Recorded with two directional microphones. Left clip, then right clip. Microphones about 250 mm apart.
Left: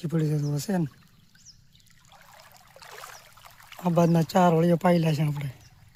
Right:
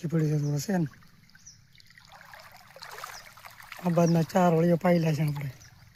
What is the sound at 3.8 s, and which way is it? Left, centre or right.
Speech, centre.